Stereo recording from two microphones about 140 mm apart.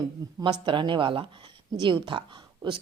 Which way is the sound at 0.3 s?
35° right (ahead or behind).